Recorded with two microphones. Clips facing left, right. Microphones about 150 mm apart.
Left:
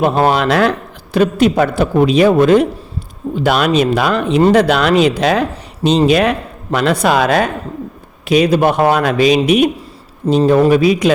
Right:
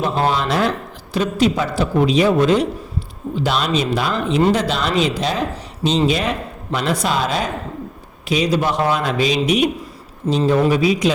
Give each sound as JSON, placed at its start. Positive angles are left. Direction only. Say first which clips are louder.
{"t": 0.0, "sound": "speech", "louder": "left 6 dB", "side_deg": 65}
{"t": 1.1, "sound": "speech", "louder": "left 6 dB", "side_deg": 60}